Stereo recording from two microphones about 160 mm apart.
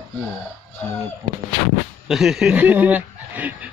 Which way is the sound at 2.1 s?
Centre (ahead or behind).